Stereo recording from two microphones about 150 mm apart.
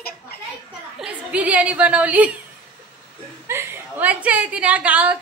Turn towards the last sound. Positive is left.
turn(degrees=-10)  # may be behind; listen again after turning